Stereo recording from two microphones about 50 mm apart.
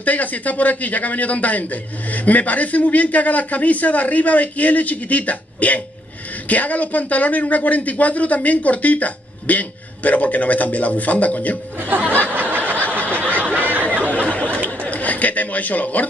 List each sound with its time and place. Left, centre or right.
0.0 s speech: left
12.4 s snicker: right
13.5 s a sound: right
14.1 s chatter: left
14.8 s chuckle: left